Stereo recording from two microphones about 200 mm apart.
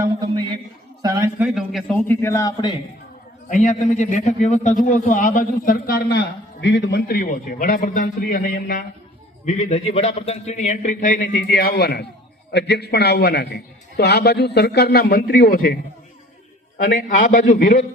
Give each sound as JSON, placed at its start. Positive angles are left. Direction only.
{"t": 0.2, "sound": "a man's voice", "side_deg": -20}
{"t": 1.5, "sound": "a man's voice", "side_deg": 0}
{"t": 3.5, "sound": "a man's voice", "side_deg": 40}
{"t": 11.3, "sound": "a man's voice", "side_deg": 50}